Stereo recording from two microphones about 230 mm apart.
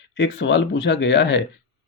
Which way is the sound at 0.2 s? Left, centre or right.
Left.